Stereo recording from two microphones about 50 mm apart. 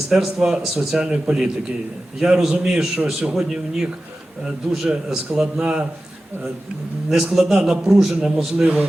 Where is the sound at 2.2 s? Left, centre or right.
Centre.